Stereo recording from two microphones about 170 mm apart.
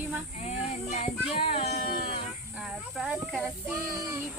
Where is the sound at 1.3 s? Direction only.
35° left (ahead or behind).